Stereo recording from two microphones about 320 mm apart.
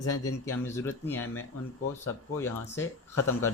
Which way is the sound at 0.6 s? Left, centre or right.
Centre.